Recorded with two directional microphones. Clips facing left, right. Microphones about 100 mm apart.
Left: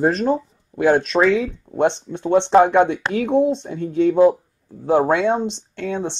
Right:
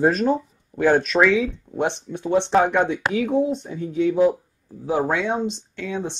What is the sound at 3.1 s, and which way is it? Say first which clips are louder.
Speech: left 3 dB; 60° left (ahead or behind).